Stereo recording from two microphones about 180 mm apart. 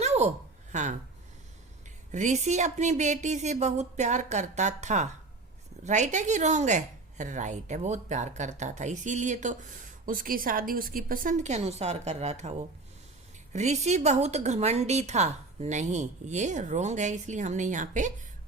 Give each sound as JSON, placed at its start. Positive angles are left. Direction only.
{"t": 0.0, "sound": "a sound", "side_deg": -40}
{"t": 0.7, "sound": "speech", "side_deg": -40}
{"t": 2.1, "sound": "a woman's voice", "side_deg": -40}